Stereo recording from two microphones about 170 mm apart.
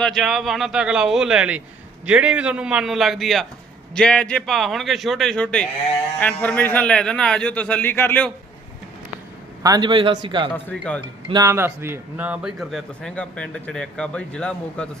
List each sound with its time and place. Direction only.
0.0 s a man's voice: centre (ahead or behind)
9.6 s a man's voice: 25° right (ahead or behind)
10.5 s a man's voice: 10° left (ahead or behind)
11.3 s speech: 20° right (ahead or behind); by 14.8 s 5° left (ahead or behind)